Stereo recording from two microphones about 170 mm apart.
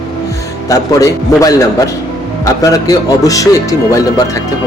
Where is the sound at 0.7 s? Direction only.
20° left (ahead or behind).